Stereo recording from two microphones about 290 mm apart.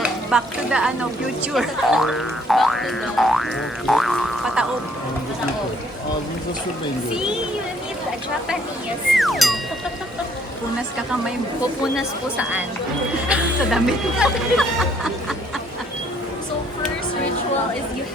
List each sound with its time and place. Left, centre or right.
0.0 s speech: centre
9.1 s speech: centre
11.9 s speech: centre